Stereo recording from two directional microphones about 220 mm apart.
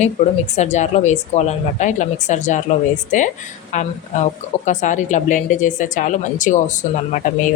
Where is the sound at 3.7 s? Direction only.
30° left (ahead or behind).